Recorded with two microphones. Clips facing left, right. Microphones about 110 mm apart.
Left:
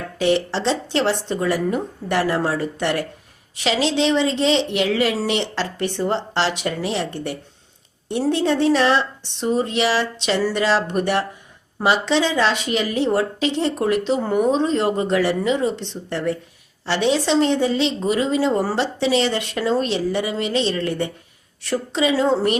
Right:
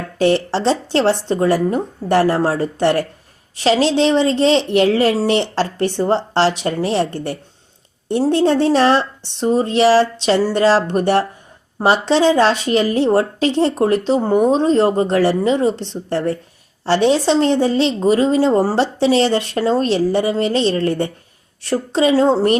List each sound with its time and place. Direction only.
0.2 s a woman's voice: 40° right (ahead or behind)